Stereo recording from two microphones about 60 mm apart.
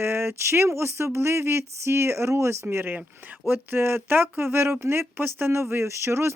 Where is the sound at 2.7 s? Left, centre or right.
Right.